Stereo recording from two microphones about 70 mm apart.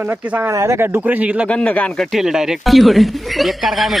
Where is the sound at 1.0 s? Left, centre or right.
Right.